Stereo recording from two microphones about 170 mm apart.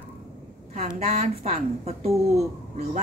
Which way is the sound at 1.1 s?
40° right (ahead or behind).